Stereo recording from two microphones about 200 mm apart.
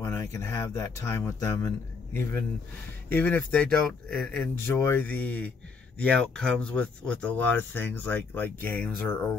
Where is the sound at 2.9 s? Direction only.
10° left (ahead or behind).